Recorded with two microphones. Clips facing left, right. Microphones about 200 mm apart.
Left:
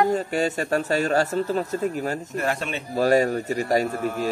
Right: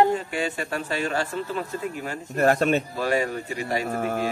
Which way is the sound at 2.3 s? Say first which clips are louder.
Right 11 dB; 45° right (ahead or behind).